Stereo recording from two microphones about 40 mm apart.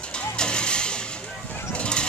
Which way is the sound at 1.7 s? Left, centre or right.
Left.